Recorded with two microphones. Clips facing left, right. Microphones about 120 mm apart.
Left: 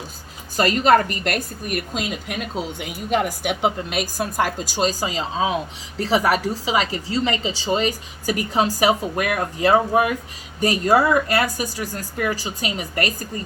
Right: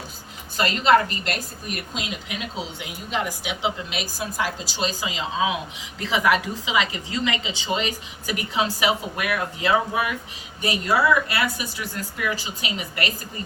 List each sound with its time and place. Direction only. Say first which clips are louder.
0.5 s a woman's voice: left 2 dB; 45° left (ahead or behind)